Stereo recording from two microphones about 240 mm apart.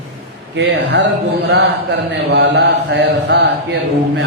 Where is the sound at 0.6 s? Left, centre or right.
Right.